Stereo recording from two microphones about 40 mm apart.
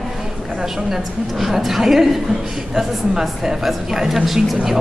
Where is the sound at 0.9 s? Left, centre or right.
Centre.